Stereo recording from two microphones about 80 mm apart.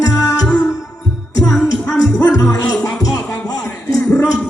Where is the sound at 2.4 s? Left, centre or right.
Left.